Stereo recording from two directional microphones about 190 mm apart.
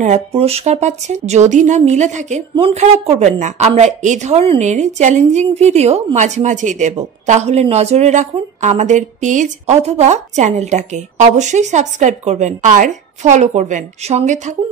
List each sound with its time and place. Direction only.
0.0 s a woman's voice: 35° right (ahead or behind)